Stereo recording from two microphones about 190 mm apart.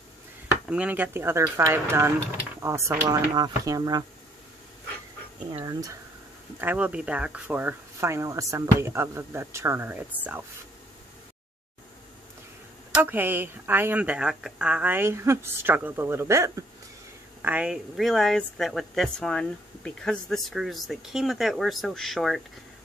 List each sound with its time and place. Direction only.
0.5 s speech: 5° right (ahead or behind)
5.6 s speech: 15° right (ahead or behind)
12.9 s a woman's voice: 10° right (ahead or behind)